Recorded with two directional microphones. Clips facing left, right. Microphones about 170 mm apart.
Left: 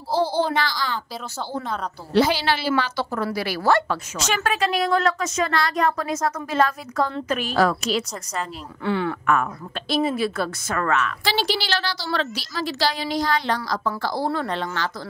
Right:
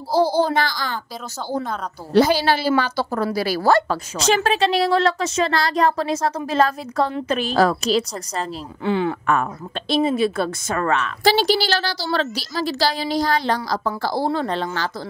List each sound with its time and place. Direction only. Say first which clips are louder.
0.1 s a child's voice: right 4 dB; 40° right (ahead or behind)
2.1 s a woman's voice: right 4 dB; 40° right (ahead or behind)
8.8 s a woman's voice: right 3 dB; 20° right (ahead or behind)
9.2 s a woman's voice: right 1 dB; 30° right (ahead or behind)
11.2 s a woman's voice: right 10 dB; 40° right (ahead or behind)